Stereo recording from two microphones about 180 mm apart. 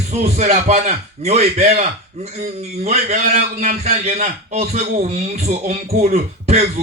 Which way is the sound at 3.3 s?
50° right (ahead or behind).